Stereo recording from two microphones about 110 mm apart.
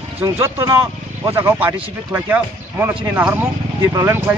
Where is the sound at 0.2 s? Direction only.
25° right (ahead or behind).